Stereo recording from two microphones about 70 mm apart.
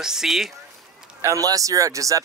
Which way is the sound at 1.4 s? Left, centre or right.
Right.